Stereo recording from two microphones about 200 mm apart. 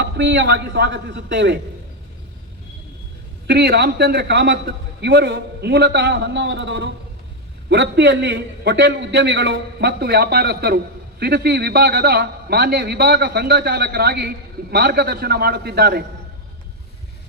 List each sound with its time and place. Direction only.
0.0 s a man's voice: 65° right (ahead or behind)
3.4 s a man's voice: 55° right (ahead or behind)